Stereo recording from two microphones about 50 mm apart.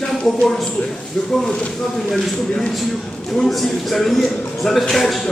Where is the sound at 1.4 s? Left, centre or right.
Centre.